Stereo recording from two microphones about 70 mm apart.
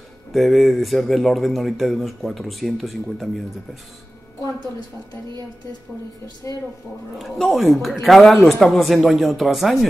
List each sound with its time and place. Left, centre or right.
0.3 s speech: centre
6.4 s speech: left
7.2 s speech: centre